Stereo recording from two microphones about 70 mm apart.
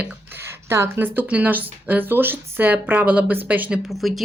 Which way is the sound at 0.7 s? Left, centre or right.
Right.